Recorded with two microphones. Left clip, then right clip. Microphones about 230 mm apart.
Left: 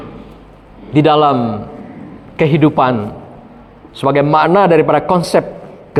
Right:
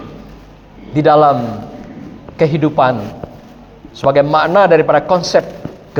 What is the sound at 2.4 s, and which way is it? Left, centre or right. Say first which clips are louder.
Speech: left 1 dB; left.